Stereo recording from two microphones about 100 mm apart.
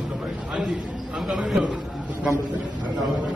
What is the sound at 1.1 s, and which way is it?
Speech, 5° right (ahead or behind).